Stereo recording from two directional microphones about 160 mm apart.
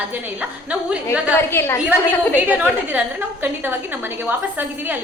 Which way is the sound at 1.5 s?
15° left (ahead or behind).